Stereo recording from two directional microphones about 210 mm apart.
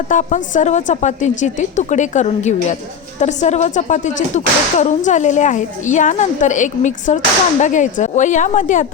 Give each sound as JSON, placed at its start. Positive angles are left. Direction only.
{"t": 0.1, "sound": "speech", "side_deg": 35}